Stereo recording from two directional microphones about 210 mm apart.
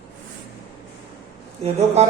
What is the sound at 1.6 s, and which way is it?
Speech, 30° right (ahead or behind).